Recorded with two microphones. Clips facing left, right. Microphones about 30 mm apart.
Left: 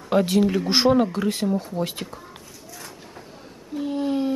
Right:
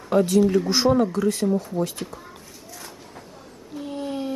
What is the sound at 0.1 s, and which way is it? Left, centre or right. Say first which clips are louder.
Speech: right 1 dB; left.